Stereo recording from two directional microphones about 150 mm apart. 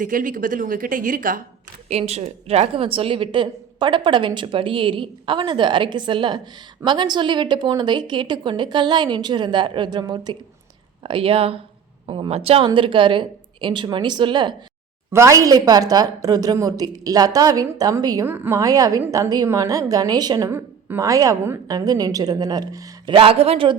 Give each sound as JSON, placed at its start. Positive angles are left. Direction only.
{"t": 0.0, "sound": "speech", "side_deg": -60}
{"t": 1.9, "sound": "a woman's voice", "side_deg": -45}
{"t": 15.1, "sound": "a woman's voice", "side_deg": -20}
{"t": 20.5, "sound": "a woman's voice", "side_deg": -15}
{"t": 23.1, "sound": "a woman's voice", "side_deg": -40}